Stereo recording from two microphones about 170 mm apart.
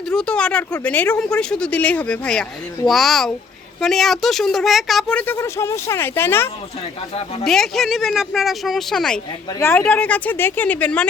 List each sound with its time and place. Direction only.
0.1 s speech: 5° left (ahead or behind)
7.4 s speech: centre (ahead or behind)
9.6 s speech: 15° left (ahead or behind)